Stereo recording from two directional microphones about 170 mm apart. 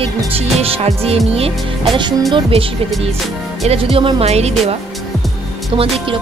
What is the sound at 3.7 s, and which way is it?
Music, 35° right (ahead or behind).